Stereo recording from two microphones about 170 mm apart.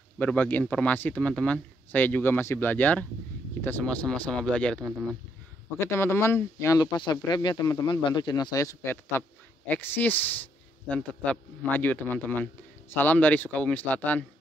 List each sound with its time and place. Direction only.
0.2 s speech: 10° left (ahead or behind)